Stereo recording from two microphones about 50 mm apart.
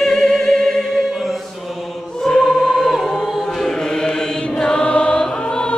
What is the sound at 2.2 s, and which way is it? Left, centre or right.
Choir, centre.